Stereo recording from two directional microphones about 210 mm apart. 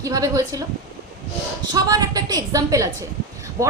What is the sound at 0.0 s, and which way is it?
Speech, 15° right (ahead or behind).